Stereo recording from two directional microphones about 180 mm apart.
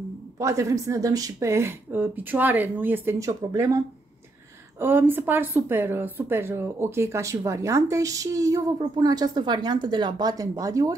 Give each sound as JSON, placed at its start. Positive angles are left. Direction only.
{"t": 0.4, "sound": "a woman's voice", "side_deg": -15}